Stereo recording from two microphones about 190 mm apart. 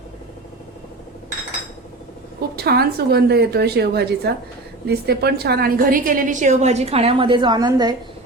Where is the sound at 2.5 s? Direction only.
55° right (ahead or behind); by 7.9 s 20° right (ahead or behind).